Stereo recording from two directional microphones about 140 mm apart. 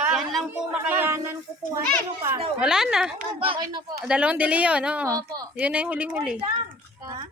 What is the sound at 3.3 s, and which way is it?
Speech, 40° right (ahead or behind).